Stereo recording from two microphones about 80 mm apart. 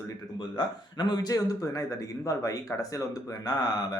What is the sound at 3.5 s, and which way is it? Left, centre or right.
Speech, left.